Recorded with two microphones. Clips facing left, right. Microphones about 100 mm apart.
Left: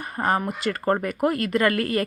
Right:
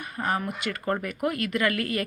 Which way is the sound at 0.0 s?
40° left (ahead or behind).